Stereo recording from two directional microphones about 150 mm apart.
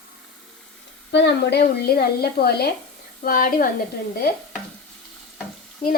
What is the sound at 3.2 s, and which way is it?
Speech, 70° left (ahead or behind).